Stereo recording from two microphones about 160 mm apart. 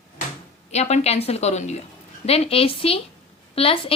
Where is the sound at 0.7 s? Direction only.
45° left (ahead or behind).